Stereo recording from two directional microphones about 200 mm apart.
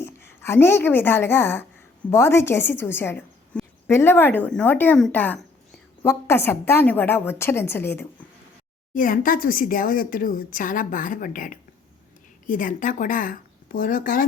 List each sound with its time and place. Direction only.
0.0 s a woman's voice: 10° left (ahead or behind)
9.0 s a woman's voice: 40° left (ahead or behind)